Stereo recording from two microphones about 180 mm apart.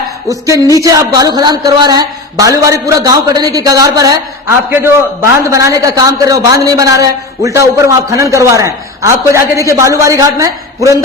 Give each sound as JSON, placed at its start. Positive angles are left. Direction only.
{"t": 0.8, "sound": "a man's voice", "side_deg": -20}